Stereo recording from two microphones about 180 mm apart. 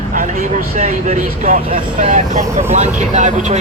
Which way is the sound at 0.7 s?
45° right (ahead or behind).